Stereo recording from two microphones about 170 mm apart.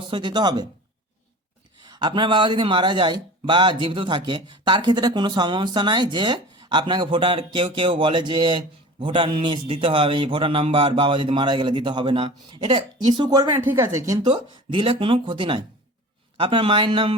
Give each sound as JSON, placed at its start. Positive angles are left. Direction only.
{"t": 0.1, "sound": "speech", "side_deg": -25}
{"t": 1.9, "sound": "speech", "side_deg": -25}